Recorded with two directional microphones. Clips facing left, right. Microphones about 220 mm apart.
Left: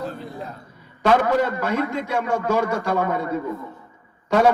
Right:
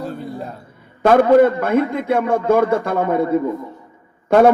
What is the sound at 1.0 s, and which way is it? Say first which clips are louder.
A man's voice: right 8 dB; 55° right (ahead or behind).